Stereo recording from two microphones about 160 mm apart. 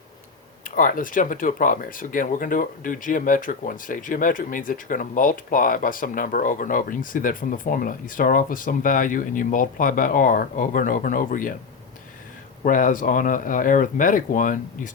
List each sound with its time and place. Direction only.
0.6 s speech: 55° left (ahead or behind)
12.6 s speech: 55° left (ahead or behind)